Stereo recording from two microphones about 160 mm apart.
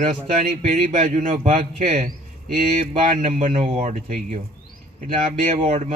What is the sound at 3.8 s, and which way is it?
Speech, 55° right (ahead or behind).